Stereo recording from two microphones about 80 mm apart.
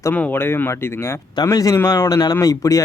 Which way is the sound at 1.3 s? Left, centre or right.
Left.